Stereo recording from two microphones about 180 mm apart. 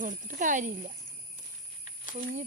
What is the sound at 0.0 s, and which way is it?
Speech, 45° right (ahead or behind).